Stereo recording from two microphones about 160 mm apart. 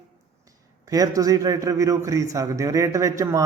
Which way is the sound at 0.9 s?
20° right (ahead or behind).